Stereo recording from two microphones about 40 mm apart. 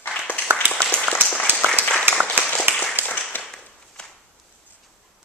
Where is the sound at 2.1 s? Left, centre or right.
Right.